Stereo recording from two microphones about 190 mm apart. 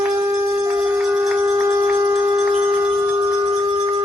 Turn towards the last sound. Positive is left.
turn(degrees=-5)  # may be behind; listen again after turning